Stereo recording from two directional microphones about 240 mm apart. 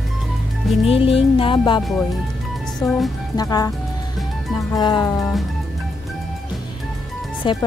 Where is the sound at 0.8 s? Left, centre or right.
Left.